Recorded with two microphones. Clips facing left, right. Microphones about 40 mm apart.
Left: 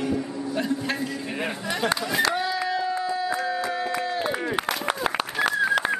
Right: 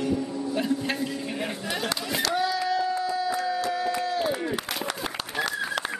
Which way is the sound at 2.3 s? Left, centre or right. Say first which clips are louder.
Right 1 dB; centre.